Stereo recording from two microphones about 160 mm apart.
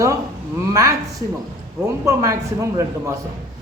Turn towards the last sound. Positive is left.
turn(degrees=-20)  # may be behind; listen again after turning